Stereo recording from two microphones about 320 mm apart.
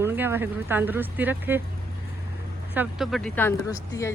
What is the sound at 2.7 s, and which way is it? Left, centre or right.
Speech, centre.